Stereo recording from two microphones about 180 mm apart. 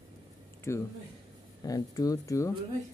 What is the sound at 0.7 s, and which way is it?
Speech, 15° left (ahead or behind).